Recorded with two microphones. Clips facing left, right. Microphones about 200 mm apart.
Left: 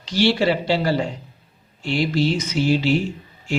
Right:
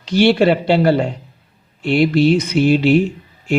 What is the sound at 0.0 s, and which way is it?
Speech, 60° right (ahead or behind).